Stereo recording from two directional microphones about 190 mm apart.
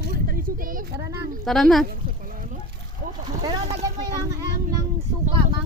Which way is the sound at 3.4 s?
25° right (ahead or behind).